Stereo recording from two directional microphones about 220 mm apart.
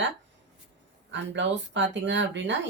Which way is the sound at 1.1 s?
55° right (ahead or behind).